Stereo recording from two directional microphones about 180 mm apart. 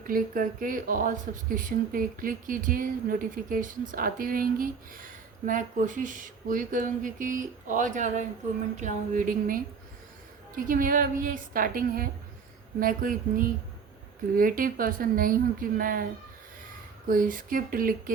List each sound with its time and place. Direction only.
0.1 s speech: 50° right (ahead or behind)
17.1 s speech: 50° right (ahead or behind)